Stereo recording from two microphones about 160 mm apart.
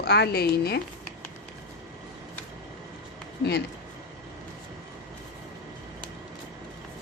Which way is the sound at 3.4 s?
90° left.